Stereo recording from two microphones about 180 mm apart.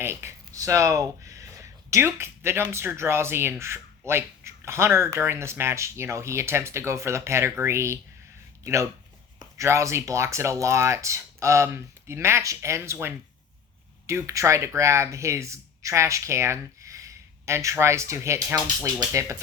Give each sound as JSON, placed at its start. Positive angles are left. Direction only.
{"t": 0.0, "sound": "speech", "side_deg": -15}